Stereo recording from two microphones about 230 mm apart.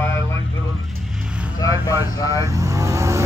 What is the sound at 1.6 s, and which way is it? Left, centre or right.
Vehicle, centre.